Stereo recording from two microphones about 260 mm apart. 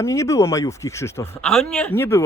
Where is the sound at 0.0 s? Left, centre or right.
Centre.